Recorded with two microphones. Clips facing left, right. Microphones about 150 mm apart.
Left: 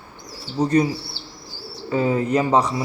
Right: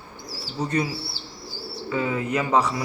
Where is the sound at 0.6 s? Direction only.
35° left (ahead or behind).